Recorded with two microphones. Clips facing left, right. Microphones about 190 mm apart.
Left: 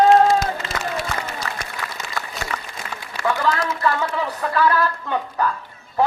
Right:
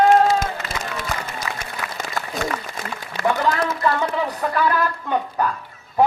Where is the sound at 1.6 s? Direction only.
50° right (ahead or behind).